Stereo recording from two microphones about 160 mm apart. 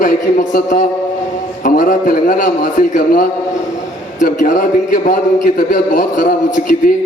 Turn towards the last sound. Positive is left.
turn(degrees=60)  # may be behind; listen again after turning